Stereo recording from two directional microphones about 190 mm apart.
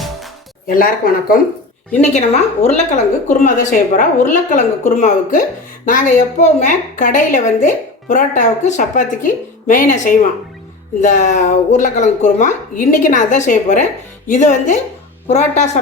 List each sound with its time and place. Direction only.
0.7 s speech: 50° left (ahead or behind)
2.0 s a woman's voice: 35° left (ahead or behind)